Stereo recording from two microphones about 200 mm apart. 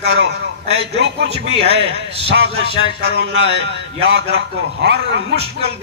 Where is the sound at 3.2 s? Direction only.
55° right (ahead or behind).